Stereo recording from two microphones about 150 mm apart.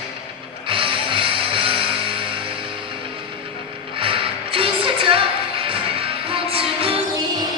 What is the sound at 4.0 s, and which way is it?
Music, 35° right (ahead or behind).